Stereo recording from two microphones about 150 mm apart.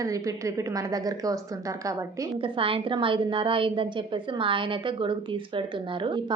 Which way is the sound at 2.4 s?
35° right (ahead or behind).